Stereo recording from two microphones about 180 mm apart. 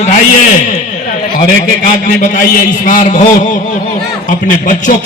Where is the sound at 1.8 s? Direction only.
45° left (ahead or behind).